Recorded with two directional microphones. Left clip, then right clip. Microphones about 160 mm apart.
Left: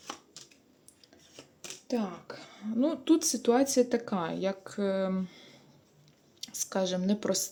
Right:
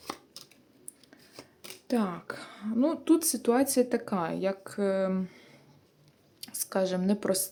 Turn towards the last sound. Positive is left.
turn(degrees=-5)  # may be behind; listen again after turning